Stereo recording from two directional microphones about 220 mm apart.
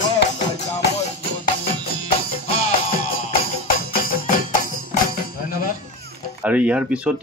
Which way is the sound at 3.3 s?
40° left (ahead or behind).